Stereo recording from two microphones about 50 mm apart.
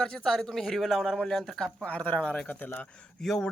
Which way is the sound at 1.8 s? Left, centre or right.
Left.